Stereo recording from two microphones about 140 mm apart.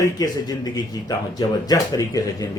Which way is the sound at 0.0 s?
25° left (ahead or behind).